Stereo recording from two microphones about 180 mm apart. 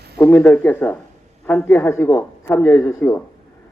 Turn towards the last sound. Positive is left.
turn(degrees=15)  # may be behind; listen again after turning